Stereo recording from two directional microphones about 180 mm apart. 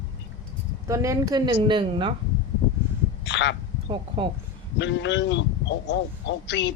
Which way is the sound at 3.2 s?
80° left.